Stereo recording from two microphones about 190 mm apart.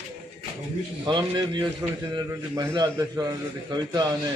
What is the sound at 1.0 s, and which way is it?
A man's voice, 25° right (ahead or behind).